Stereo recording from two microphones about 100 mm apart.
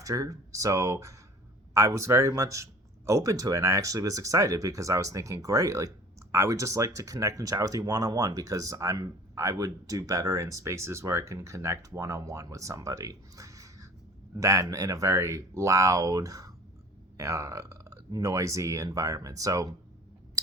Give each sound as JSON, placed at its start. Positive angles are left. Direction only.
{"t": 0.0, "sound": "speech", "side_deg": -35}